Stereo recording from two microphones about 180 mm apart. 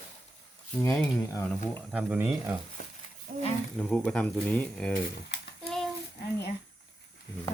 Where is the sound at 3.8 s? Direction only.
5° left (ahead or behind).